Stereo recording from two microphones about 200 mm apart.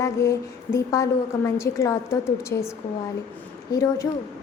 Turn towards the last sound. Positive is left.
turn(degrees=15)  # may be behind; listen again after turning